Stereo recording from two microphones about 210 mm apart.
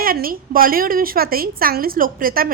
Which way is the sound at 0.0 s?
45° right (ahead or behind).